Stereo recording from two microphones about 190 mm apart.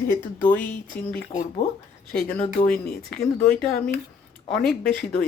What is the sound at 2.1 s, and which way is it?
Speech, 5° left (ahead or behind).